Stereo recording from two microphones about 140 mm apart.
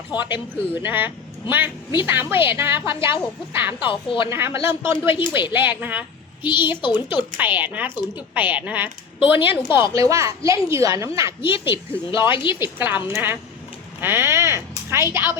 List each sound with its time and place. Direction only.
0.1 s a woman's voice: 35° left (ahead or behind)
0.8 s a woman's voice: 15° right (ahead or behind)
3.8 s a woman's voice: 35° left (ahead or behind)
4.3 s a woman's voice: 20° right (ahead or behind)
5.0 s a woman's voice: 35° left (ahead or behind)
5.5 s a woman's voice: 15° right (ahead or behind)
6.4 s a woman's voice: 35° left (ahead or behind)
7.3 s a woman's voice: 10° right (ahead or behind)
11.4 s a woman's voice: 40° left (ahead or behind)
12.6 s a woman's voice: 15° right (ahead or behind)